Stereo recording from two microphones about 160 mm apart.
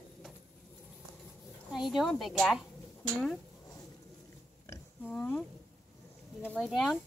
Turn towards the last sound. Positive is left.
turn(degrees=5)  # may be behind; listen again after turning